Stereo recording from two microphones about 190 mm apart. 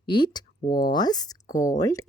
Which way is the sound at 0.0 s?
25° left (ahead or behind).